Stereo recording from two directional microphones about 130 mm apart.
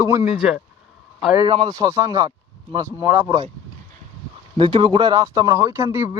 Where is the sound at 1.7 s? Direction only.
25° right (ahead or behind).